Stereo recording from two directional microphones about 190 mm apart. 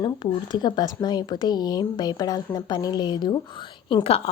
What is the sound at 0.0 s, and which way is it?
A woman's voice, 25° left (ahead or behind).